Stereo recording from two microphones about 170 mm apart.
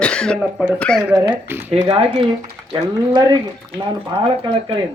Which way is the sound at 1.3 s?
10° right (ahead or behind).